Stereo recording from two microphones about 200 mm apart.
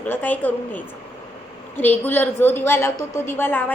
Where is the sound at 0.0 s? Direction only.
10° left (ahead or behind).